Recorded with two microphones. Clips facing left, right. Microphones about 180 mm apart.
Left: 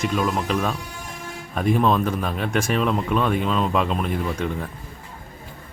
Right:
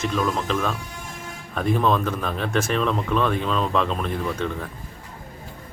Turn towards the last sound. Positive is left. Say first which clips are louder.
# left 1 dB
turn(degrees=10)  # may be behind; listen again after turning